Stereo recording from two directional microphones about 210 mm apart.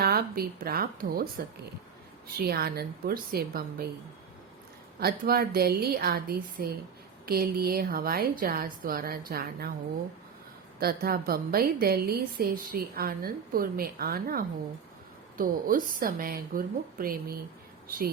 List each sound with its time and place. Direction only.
0.0 s a woman's voice: 45° right (ahead or behind)
4.9 s a woman's voice: 45° right (ahead or behind)
10.8 s a woman's voice: 45° right (ahead or behind)